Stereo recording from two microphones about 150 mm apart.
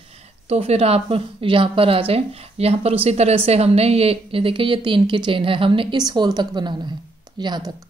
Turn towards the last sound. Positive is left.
turn(degrees=-30)  # may be behind; listen again after turning